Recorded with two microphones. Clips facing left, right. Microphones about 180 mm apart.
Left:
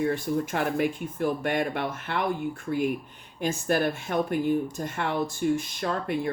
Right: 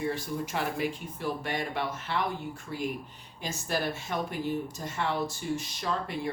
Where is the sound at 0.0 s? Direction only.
55° left (ahead or behind).